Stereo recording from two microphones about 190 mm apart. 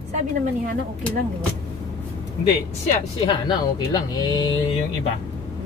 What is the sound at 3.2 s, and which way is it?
Speech, 25° left (ahead or behind).